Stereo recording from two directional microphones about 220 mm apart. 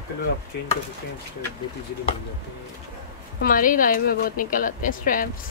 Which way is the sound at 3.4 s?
40° left (ahead or behind).